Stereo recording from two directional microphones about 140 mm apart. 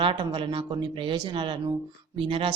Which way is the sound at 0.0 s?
35° right (ahead or behind).